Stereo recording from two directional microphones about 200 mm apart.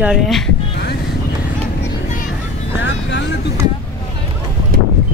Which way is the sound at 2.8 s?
65° left (ahead or behind).